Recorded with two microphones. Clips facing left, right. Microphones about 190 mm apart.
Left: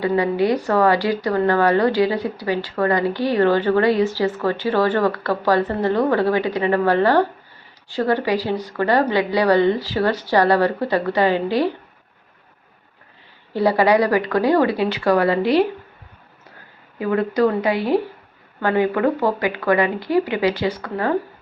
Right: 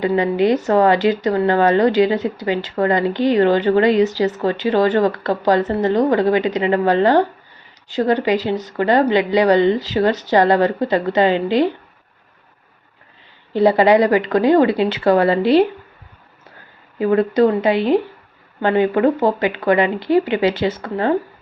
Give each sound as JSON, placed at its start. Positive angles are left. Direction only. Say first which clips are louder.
{"t": 0.0, "sound": "a woman's voice", "louder": "right 2 dB", "side_deg": -20}
{"t": 13.5, "sound": "a woman's voice", "louder": "right 4 dB", "side_deg": -20}
{"t": 17.0, "sound": "a woman's voice", "louder": "right 4 dB", "side_deg": -30}